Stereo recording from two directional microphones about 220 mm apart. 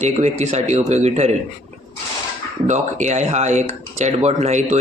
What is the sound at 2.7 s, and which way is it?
A man's voice, 35° right (ahead or behind).